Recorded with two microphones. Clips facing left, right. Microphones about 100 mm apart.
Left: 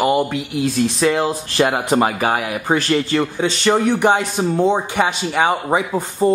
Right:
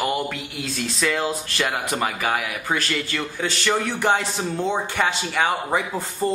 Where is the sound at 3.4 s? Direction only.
20° left (ahead or behind).